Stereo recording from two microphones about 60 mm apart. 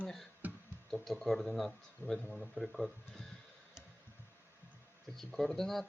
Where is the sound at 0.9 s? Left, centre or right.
Centre.